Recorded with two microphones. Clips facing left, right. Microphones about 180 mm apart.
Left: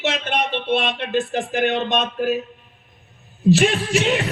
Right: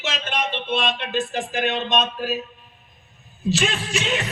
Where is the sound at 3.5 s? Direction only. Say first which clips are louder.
Left 7 dB; 60° left (ahead or behind).